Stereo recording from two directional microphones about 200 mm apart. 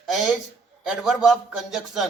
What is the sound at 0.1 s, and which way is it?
A man's voice, centre (ahead or behind).